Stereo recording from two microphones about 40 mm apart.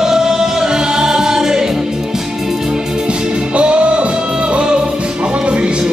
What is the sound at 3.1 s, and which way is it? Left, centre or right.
Music, right.